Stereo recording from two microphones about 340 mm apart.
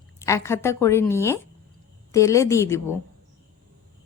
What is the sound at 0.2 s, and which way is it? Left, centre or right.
A woman's voice, centre.